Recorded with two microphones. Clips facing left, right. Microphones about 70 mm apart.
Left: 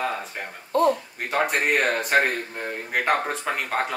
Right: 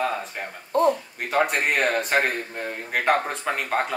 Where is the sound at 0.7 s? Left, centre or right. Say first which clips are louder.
Even; right.